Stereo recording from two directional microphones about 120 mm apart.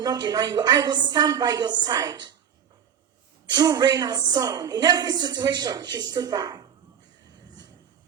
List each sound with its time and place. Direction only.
0.0 s a woman's voice: 35° right (ahead or behind)
3.5 s a woman's voice: 35° right (ahead or behind)